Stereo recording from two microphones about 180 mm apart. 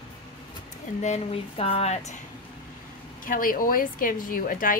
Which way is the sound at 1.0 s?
35° left (ahead or behind).